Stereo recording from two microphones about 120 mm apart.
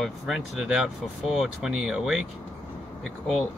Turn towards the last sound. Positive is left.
turn(degrees=0)  # may be behind; listen again after turning